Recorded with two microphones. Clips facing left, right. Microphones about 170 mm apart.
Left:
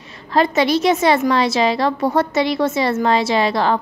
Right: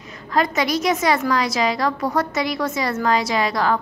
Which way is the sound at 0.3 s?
30° left (ahead or behind).